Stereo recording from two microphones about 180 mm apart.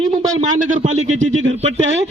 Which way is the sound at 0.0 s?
35° right (ahead or behind).